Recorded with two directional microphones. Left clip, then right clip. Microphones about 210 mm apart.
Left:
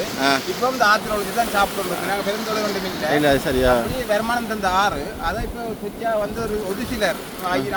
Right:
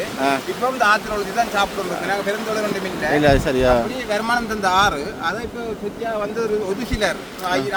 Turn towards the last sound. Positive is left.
turn(degrees=-5)  # may be behind; listen again after turning